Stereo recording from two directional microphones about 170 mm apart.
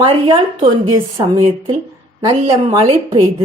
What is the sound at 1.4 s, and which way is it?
Speech, 30° right (ahead or behind).